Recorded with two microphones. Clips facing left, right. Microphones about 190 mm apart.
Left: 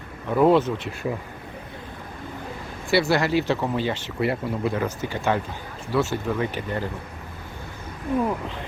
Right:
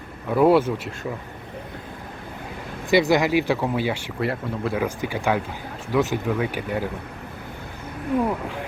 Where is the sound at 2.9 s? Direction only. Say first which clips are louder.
Right 2 dB; 15° right (ahead or behind).